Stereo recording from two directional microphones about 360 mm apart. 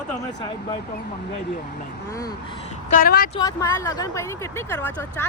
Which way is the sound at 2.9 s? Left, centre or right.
Left.